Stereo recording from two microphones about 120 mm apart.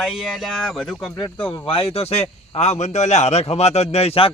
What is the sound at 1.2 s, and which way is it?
Speech, 15° left (ahead or behind).